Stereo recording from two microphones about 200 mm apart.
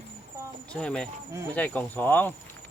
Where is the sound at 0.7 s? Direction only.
5° left (ahead or behind).